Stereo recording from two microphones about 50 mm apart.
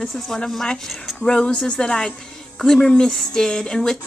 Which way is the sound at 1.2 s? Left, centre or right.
Centre.